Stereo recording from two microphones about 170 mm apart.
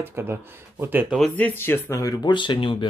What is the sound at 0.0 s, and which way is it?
Speech, 10° right (ahead or behind).